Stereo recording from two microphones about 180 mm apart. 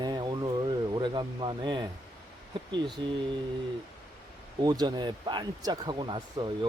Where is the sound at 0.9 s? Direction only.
25° right (ahead or behind).